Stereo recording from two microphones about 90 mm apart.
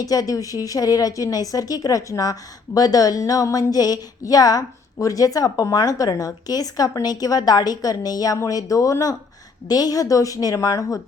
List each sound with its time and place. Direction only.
0.0 s a woman's voice: 40° left (ahead or behind)